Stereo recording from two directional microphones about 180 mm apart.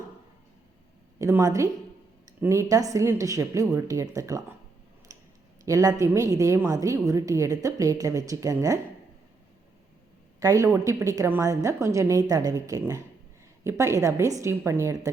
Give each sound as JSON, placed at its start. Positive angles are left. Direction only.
{"t": 1.2, "sound": "a woman's voice", "side_deg": -15}
{"t": 5.1, "sound": "a sound", "side_deg": -20}
{"t": 5.6, "sound": "a woman's voice", "side_deg": -15}
{"t": 10.4, "sound": "a woman's voice", "side_deg": -15}